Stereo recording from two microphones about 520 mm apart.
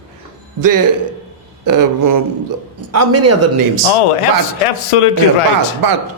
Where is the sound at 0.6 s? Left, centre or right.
Right.